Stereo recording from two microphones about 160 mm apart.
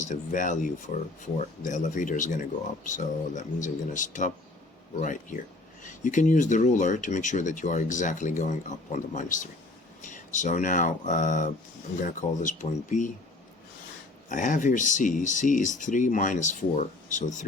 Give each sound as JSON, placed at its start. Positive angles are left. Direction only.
{"t": 0.0, "sound": "speech", "side_deg": 50}
{"t": 14.3, "sound": "speech", "side_deg": 55}